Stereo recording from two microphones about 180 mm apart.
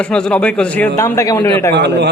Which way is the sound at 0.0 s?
5° left (ahead or behind).